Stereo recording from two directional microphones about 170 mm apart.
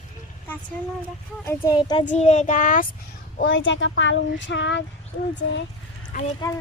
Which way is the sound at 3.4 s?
90° left.